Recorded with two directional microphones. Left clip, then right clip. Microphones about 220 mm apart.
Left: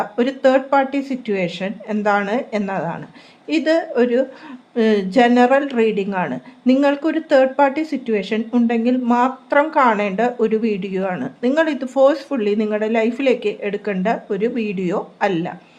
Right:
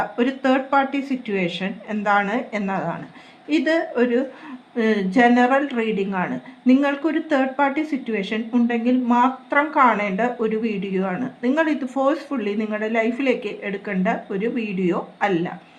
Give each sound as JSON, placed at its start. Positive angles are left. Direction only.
{"t": 0.2, "sound": "speech", "side_deg": 50}